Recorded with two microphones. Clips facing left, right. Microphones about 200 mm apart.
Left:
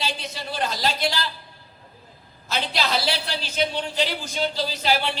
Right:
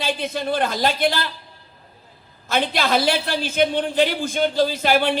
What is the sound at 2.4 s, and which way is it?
A man's voice, 50° right (ahead or behind).